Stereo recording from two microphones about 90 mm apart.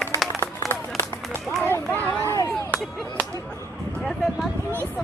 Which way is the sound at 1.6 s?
20° left (ahead or behind).